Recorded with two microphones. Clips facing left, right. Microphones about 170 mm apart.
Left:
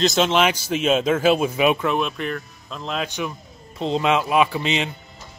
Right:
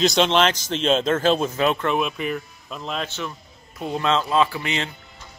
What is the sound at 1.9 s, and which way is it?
Speech, 5° right (ahead or behind).